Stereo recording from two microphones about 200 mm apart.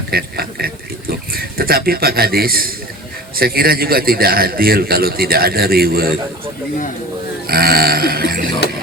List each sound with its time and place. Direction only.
0.1 s a man's voice: 50° right (ahead or behind)
7.4 s a man's voice: 50° right (ahead or behind)